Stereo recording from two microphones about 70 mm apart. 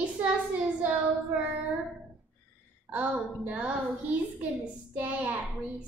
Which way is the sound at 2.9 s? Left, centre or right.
Right.